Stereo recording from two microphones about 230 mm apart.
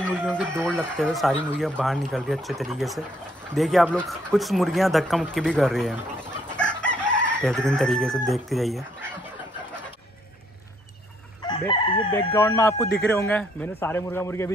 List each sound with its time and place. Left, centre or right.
0.0 s a sound: centre
0.6 s speech: centre
6.5 s chicken: centre
7.4 s speech: centre
11.4 s chicken: centre
12.3 s speech: centre